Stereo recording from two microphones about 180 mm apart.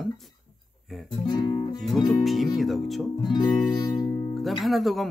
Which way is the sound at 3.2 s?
25° left (ahead or behind).